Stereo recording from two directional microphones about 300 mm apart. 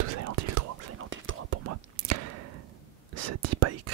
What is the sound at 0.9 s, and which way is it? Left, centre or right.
Whispering, right.